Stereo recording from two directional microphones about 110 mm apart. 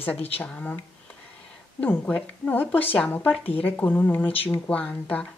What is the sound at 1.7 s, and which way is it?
Speech, 15° left (ahead or behind).